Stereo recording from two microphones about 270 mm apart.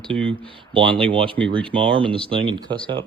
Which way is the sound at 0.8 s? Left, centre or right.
Centre.